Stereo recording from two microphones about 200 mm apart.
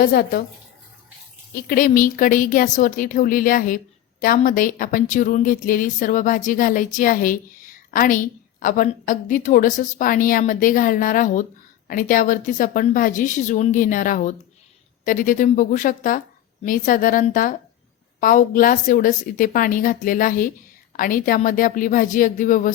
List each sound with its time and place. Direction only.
0.0 s speech: 50° left (ahead or behind)
1.5 s a woman's voice: 45° left (ahead or behind)